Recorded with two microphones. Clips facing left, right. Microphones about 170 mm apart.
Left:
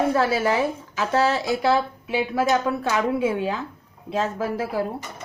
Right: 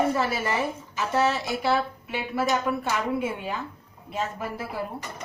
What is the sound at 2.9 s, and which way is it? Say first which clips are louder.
A woman's voice: left 5 dB; 90° left.